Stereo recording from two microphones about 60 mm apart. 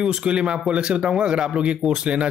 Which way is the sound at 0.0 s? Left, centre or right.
Centre.